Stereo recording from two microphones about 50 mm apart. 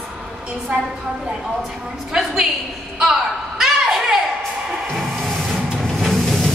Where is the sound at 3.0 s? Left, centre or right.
Centre.